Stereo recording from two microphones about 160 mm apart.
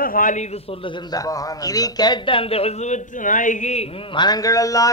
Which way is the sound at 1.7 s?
25° left (ahead or behind).